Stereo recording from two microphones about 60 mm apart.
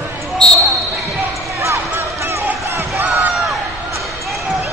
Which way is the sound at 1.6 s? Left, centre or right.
Right.